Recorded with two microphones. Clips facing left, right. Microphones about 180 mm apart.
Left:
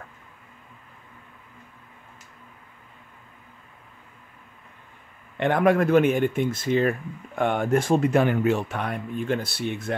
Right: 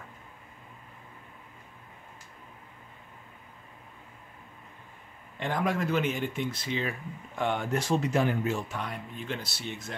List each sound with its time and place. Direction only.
5.4 s speech: 60° left (ahead or behind)